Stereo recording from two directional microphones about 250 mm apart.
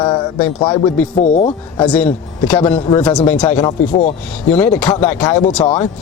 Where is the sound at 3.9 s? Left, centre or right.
Left.